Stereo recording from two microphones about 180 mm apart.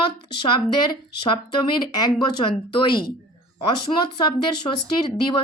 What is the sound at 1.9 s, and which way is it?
Speech, 25° left (ahead or behind).